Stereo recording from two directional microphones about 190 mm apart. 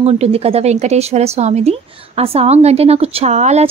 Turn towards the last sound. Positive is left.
turn(degrees=-35)  # may be behind; listen again after turning